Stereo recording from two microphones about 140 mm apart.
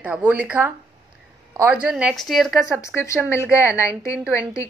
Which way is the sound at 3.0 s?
20° left (ahead or behind).